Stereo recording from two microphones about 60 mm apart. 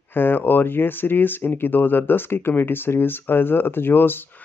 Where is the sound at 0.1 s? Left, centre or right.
Left.